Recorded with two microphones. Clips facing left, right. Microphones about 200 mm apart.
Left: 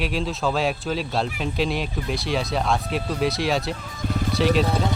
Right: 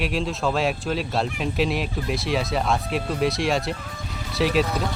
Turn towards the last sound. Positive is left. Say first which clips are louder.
# left 2 dB
turn(degrees=30)  # may be behind; listen again after turning